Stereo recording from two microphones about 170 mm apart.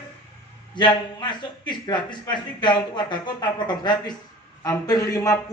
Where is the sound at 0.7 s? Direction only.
25° left (ahead or behind).